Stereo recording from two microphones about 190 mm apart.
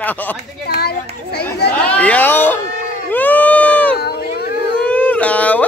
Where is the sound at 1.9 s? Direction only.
5° left (ahead or behind).